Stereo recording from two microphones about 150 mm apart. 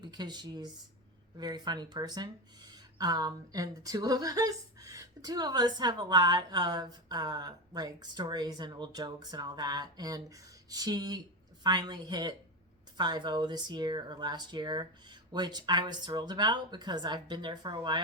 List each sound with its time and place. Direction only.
0.0 s speech: 30° right (ahead or behind)